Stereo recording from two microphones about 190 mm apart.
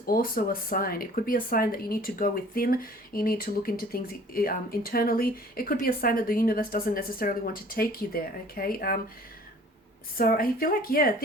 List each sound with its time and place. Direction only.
0.0 s speech: 50° left (ahead or behind)
10.2 s speech: 50° left (ahead or behind)